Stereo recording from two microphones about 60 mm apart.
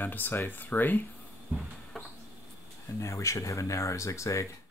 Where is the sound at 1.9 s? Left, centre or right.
Centre.